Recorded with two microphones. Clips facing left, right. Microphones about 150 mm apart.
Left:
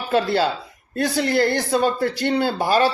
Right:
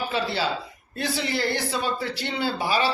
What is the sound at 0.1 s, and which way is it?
Speech, 50° left (ahead or behind).